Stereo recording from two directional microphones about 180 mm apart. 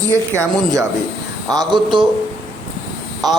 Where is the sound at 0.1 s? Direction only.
15° right (ahead or behind).